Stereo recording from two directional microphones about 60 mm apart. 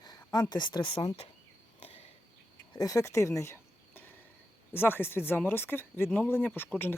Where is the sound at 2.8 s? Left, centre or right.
Left.